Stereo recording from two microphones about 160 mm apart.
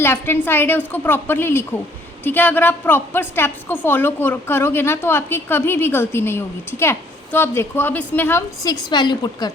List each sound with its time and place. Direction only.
0.0 s a woman's voice: 15° left (ahead or behind)